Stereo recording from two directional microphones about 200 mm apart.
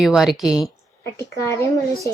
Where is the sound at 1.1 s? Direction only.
15° left (ahead or behind).